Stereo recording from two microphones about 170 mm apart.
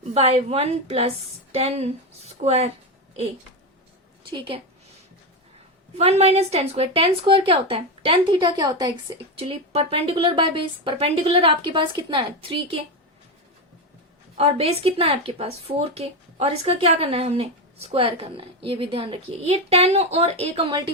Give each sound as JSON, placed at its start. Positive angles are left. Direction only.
{"t": 0.1, "sound": "speech", "side_deg": -40}
{"t": 4.3, "sound": "speech", "side_deg": -30}
{"t": 6.0, "sound": "speech", "side_deg": -40}
{"t": 9.4, "sound": "speech", "side_deg": -35}
{"t": 14.3, "sound": "speech", "side_deg": -35}